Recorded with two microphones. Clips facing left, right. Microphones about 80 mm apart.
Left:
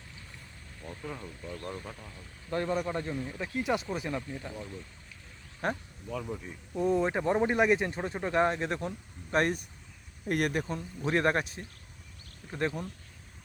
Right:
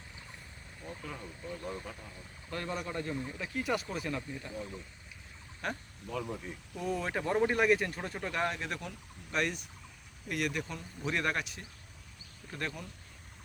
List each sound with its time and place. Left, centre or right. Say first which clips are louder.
0.8 s vehicle: left 1 dB; centre
1.5 s speech: left 1 dB; centre
2.5 s speech: left 7 dB; left
5.6 s speech: left 5 dB; left
6.1 s speech: left 1 dB; centre
6.7 s speech: left 7 dB; left
9.3 s speech: left 6 dB; left